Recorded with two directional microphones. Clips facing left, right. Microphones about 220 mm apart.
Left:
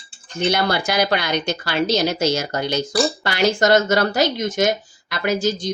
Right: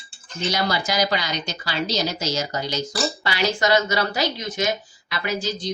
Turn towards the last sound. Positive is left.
turn(degrees=45)  # may be behind; listen again after turning